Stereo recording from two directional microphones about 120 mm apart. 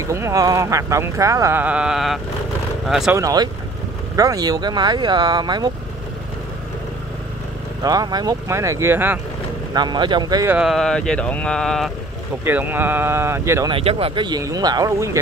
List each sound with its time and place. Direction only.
0.0 s speech: 25° right (ahead or behind)
1.6 s speech: 10° right (ahead or behind)
3.2 s speech: 30° right (ahead or behind)
7.8 s speech: 30° right (ahead or behind)
9.8 s speech: 35° right (ahead or behind)
10.6 s speech: centre (ahead or behind)
12.4 s speech: 15° right (ahead or behind)
13.7 s speech: 50° right (ahead or behind); by 15.0 s 30° right (ahead or behind)